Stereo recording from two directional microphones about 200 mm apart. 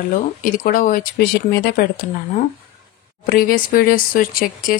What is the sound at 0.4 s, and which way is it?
Speech, 45° left (ahead or behind).